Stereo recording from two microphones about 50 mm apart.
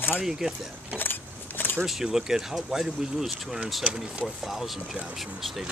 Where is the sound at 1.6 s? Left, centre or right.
Left.